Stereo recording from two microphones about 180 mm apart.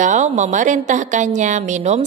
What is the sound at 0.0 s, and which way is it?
A woman's voice, 40° right (ahead or behind).